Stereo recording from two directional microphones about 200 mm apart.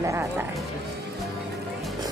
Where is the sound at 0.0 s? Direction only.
15° right (ahead or behind).